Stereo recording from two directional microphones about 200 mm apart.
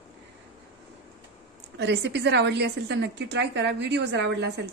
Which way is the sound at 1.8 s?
60° right (ahead or behind).